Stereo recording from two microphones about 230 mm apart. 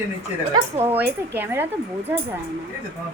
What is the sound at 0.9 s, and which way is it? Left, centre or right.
Speech, centre.